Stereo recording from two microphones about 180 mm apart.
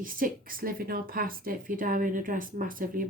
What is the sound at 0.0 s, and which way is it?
Speech, 50° right (ahead or behind).